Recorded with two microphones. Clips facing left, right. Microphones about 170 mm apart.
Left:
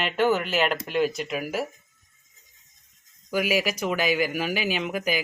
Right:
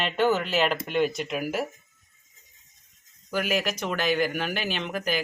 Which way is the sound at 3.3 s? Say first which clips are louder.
Left 2 dB; 5° left (ahead or behind).